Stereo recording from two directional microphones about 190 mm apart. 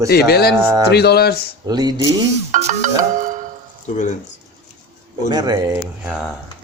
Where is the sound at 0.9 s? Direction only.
55° left (ahead or behind).